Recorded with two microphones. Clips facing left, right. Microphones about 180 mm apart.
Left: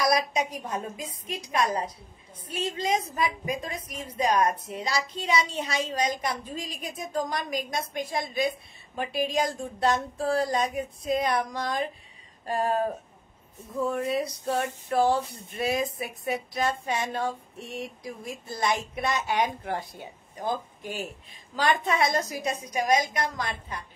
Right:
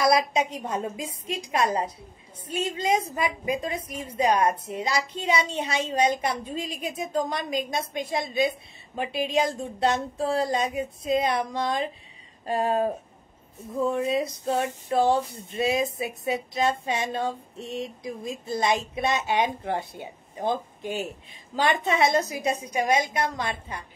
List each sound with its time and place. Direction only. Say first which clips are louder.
0.0 s speech: right 3 dB; 25° right (ahead or behind)
13.8 s speech: right 3 dB; 20° right (ahead or behind)